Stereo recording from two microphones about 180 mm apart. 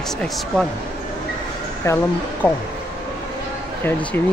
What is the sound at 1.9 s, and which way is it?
Speech, 15° left (ahead or behind).